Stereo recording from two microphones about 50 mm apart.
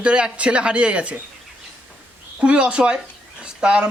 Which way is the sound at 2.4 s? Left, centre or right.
Right.